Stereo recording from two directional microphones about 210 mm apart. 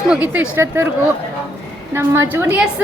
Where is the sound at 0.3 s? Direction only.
10° right (ahead or behind).